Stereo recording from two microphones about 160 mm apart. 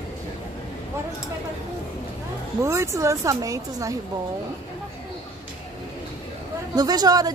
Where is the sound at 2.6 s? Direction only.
15° right (ahead or behind).